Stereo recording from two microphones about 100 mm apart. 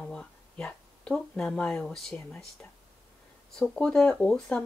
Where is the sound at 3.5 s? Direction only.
5° left (ahead or behind).